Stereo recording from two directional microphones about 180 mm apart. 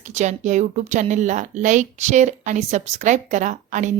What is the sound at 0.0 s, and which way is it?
Speech, 40° right (ahead or behind).